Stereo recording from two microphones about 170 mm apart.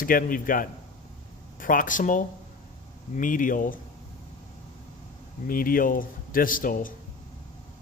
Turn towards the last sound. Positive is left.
turn(degrees=55)  # may be behind; listen again after turning